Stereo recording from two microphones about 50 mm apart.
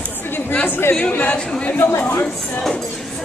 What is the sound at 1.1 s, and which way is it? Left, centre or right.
Speech, left.